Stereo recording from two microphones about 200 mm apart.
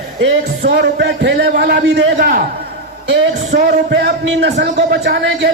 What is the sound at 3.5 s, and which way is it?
A man's voice, 50° right (ahead or behind).